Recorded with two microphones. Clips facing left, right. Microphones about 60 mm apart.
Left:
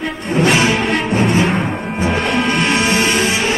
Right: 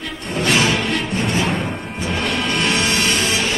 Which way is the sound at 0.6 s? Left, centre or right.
Centre.